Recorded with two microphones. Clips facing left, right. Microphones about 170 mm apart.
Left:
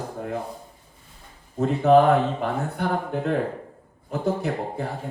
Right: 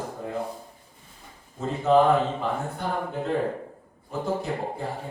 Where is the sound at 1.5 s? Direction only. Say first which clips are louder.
Left 4 dB; 65° left (ahead or behind).